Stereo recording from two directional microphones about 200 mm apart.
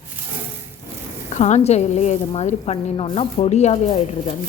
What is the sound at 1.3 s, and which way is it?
A woman's voice, 35° left (ahead or behind).